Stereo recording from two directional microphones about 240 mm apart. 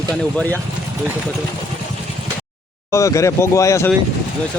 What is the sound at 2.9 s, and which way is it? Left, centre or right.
Speech, centre.